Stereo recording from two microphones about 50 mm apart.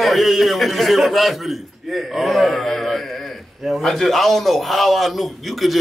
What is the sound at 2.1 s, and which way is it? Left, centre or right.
A man's voice, centre.